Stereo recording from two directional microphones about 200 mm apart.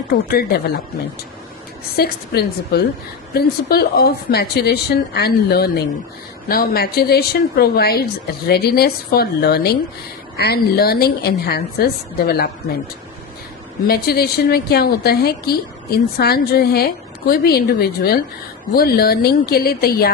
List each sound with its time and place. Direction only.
0.1 s a woman's voice: 50° left (ahead or behind)
2.0 s a woman's voice: 50° left (ahead or behind)
13.8 s a woman's voice: 50° left (ahead or behind)